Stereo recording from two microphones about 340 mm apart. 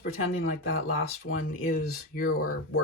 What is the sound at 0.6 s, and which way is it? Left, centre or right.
Speech, left.